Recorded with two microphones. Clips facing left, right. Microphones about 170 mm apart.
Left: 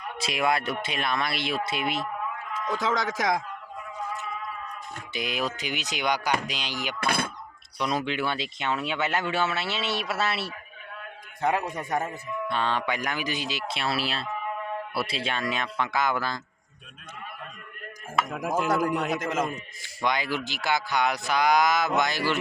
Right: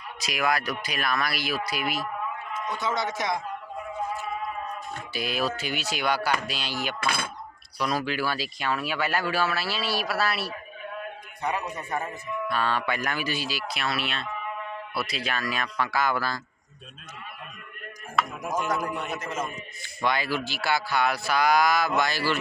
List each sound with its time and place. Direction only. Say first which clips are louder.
0.2 s speech: left 1 dB; 25° left (ahead or behind)
2.6 s speech: left 2 dB; 90° left
5.1 s speech: right 1 dB; 20° left (ahead or behind)
7.0 s speech: left 4 dB; 55° left (ahead or behind)
7.8 s speech: even; 25° left (ahead or behind)
11.8 s speech: left 3 dB; 90° left
12.5 s speech: even; 20° left (ahead or behind)
18.3 s speech: left 3 dB; 90° left
20.0 s speech: right 1 dB; 15° left (ahead or behind)